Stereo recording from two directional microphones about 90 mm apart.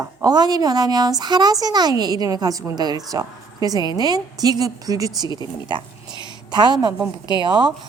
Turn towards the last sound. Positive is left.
turn(degrees=-55)  # may be behind; listen again after turning